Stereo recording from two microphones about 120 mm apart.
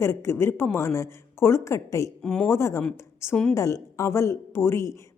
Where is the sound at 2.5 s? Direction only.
25° left (ahead or behind).